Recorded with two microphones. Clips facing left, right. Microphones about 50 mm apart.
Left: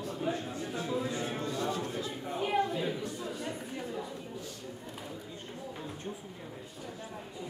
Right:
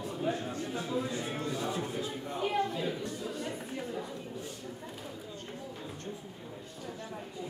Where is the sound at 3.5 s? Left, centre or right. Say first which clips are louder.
Even; centre.